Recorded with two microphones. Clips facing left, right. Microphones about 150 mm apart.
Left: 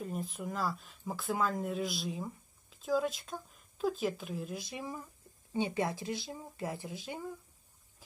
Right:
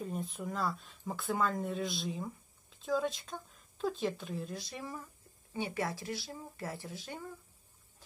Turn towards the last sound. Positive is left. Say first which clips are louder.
# left 3 dB
turn(degrees=15)  # may be behind; listen again after turning